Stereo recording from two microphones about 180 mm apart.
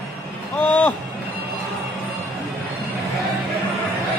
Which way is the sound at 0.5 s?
10° left (ahead or behind).